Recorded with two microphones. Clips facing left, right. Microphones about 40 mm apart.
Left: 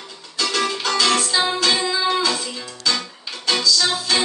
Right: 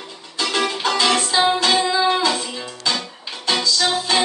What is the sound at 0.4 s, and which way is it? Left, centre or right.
Music, right.